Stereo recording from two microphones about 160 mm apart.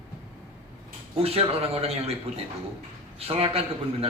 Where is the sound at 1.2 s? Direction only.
40° right (ahead or behind).